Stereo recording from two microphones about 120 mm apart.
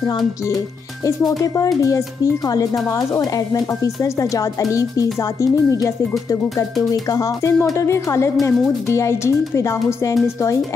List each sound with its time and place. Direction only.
1.8 s speech: 25° left (ahead or behind)
6.9 s speech: 25° left (ahead or behind)